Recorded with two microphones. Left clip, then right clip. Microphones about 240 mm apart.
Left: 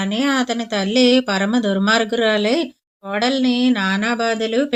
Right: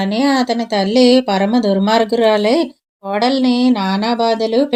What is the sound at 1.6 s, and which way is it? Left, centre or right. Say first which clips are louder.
Speech: right 3 dB; right.